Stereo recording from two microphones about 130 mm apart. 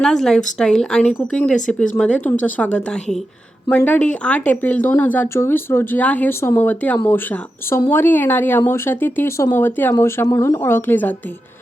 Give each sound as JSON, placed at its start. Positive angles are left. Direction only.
{"t": 0.0, "sound": "a woman's voice", "side_deg": 5}